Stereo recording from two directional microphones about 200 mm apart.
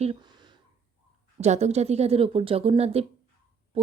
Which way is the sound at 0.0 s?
25° right (ahead or behind).